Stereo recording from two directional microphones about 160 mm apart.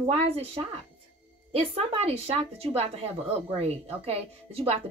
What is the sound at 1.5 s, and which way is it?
Speech, 35° right (ahead or behind).